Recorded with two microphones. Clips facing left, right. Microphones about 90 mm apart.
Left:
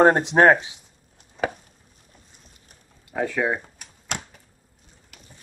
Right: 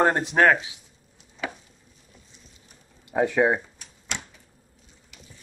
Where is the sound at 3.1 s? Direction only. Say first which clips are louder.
Right 3 dB; 20° right (ahead or behind).